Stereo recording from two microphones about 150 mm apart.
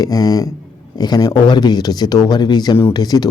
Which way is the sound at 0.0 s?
25° left (ahead or behind).